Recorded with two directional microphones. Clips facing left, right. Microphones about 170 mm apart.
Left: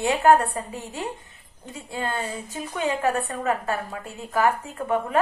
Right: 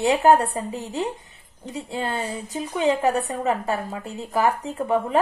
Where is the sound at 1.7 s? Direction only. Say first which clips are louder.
Right 2 dB; 20° right (ahead or behind).